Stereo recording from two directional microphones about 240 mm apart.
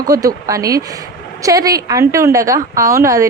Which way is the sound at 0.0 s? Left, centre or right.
Centre.